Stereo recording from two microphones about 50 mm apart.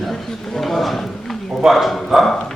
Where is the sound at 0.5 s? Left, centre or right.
Centre.